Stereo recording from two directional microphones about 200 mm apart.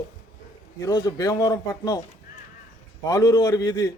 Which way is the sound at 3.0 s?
15° left (ahead or behind).